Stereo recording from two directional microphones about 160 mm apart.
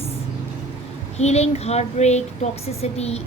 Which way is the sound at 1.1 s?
40° left (ahead or behind).